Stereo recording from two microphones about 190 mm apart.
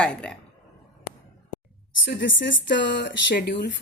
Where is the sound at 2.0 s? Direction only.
70° left (ahead or behind).